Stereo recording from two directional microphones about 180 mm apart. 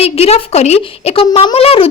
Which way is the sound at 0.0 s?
35° left (ahead or behind).